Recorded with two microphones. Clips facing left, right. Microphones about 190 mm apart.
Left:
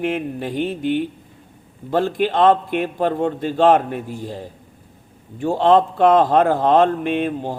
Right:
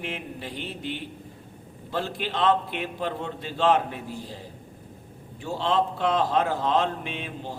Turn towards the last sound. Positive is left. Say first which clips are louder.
# left 13 dB
turn(degrees=55)  # may be behind; listen again after turning